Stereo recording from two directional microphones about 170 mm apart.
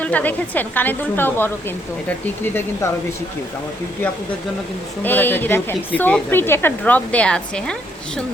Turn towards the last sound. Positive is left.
turn(degrees=5)  # may be behind; listen again after turning